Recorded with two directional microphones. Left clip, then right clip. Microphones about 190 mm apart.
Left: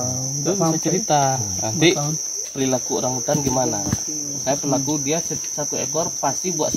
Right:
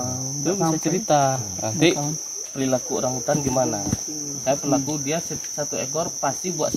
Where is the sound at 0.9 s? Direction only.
25° right (ahead or behind).